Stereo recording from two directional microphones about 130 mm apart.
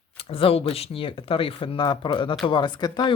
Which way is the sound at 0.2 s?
45° left (ahead or behind).